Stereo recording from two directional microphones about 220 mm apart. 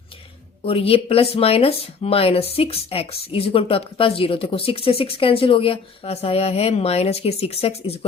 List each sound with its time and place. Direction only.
0.6 s speech: 25° left (ahead or behind)